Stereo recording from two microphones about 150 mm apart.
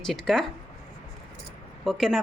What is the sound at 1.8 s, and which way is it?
Speech, centre (ahead or behind).